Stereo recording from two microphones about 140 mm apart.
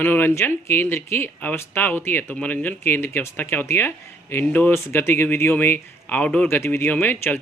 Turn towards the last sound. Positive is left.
turn(degrees=15)  # may be behind; listen again after turning